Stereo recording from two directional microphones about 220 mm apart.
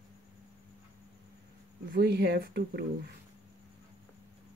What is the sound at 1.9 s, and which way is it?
Speech, 45° right (ahead or behind).